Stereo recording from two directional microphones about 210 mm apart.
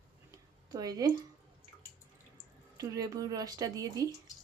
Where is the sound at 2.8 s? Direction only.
15° right (ahead or behind).